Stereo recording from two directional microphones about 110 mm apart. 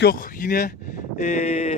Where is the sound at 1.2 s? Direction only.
75° left (ahead or behind).